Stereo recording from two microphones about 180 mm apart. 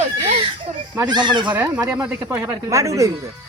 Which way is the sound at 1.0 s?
25° right (ahead or behind).